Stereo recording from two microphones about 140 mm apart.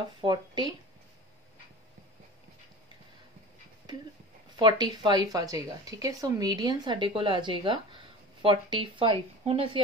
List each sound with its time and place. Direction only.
0.2 s speech: 30° right (ahead or behind)
4.6 s a woman's voice: 30° right (ahead or behind); by 9.7 s 45° right (ahead or behind)